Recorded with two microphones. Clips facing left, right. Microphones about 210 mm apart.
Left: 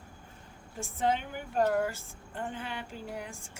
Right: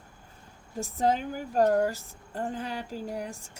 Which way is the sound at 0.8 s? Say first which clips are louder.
Right 4 dB; 40° right (ahead or behind).